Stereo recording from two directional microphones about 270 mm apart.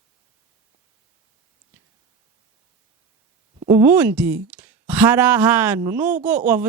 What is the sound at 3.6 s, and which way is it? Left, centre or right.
A woman's voice, centre.